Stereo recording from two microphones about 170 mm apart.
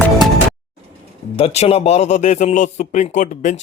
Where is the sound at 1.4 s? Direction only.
35° left (ahead or behind).